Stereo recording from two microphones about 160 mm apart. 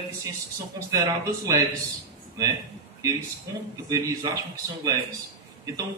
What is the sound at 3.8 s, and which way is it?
A man's voice, 20° right (ahead or behind).